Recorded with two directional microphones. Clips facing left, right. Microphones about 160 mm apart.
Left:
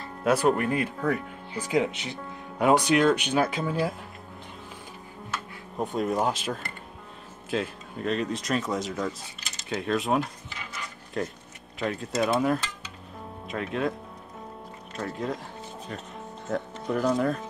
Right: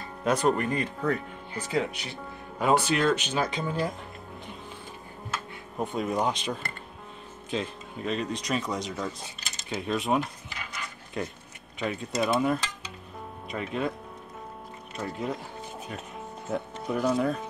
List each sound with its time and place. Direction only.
0.2 s speech: 5° left (ahead or behind)
5.8 s speech: centre (ahead or behind)
11.8 s speech: centre (ahead or behind)
15.0 s speech: 5° right (ahead or behind)
16.4 s speech: 5° right (ahead or behind)